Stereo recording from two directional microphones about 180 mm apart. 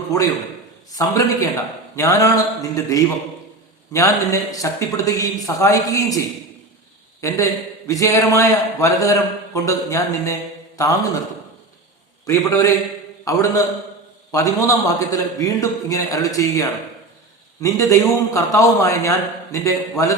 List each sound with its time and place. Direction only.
0.1 s a man's voice: 20° left (ahead or behind)
7.2 s a man's voice: 15° left (ahead or behind)
12.2 s a man's voice: 15° left (ahead or behind)